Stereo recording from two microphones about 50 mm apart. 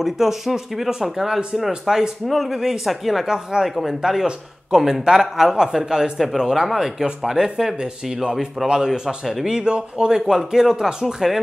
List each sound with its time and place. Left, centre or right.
0.0 s a man's voice: centre